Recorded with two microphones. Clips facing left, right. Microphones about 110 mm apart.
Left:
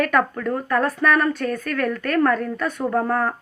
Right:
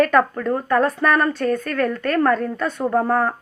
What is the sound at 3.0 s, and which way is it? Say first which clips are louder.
Speech: right 3 dB; 10° right (ahead or behind).